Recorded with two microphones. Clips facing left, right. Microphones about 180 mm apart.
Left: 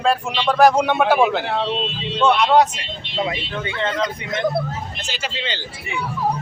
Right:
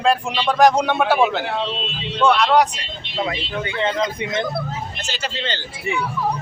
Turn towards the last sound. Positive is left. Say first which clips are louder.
# right 1 dB
turn(degrees=10)  # may be behind; listen again after turning